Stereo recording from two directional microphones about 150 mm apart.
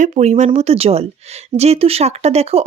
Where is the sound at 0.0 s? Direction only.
50° right (ahead or behind).